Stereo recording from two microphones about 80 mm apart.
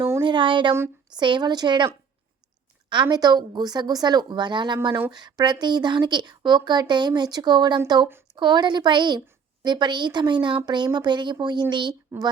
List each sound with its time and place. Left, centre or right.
0.2 s speech: right
1.1 s speech: right
2.9 s a woman's voice: right